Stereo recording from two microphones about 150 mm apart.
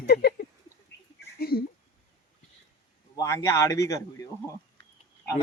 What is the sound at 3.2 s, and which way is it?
A man's voice, 20° left (ahead or behind).